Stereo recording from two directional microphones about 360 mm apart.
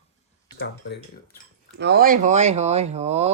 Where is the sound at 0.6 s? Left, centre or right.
Left.